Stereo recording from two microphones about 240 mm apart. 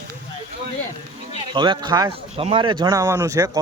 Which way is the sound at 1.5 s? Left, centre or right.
Centre.